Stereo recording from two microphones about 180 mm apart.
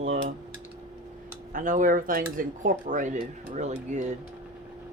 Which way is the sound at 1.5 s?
50° right (ahead or behind).